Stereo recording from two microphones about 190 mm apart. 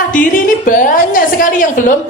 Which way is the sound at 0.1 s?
45° left (ahead or behind).